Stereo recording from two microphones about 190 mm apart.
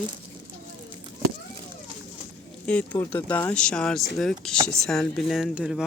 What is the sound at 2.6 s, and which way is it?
Speech, 5° left (ahead or behind).